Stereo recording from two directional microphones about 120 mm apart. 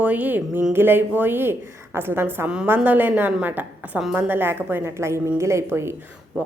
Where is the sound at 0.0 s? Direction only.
15° right (ahead or behind).